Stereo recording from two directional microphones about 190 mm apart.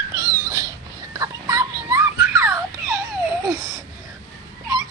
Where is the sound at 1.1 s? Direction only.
20° right (ahead or behind).